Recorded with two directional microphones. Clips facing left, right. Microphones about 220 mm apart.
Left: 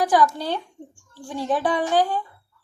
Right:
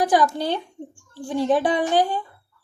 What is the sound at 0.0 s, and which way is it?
A woman's voice, 20° right (ahead or behind).